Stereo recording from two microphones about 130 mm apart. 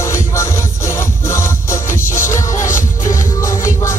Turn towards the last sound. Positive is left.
turn(degrees=20)  # may be behind; listen again after turning